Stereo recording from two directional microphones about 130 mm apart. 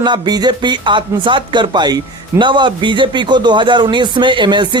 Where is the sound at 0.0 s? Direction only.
35° right (ahead or behind).